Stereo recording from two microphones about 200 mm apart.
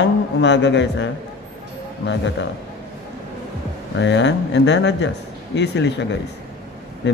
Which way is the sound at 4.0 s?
65° left (ahead or behind).